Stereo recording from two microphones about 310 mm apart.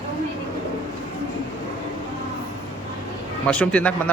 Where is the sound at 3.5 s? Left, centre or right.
Centre.